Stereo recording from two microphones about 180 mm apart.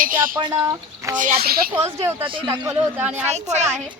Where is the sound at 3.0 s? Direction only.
10° right (ahead or behind).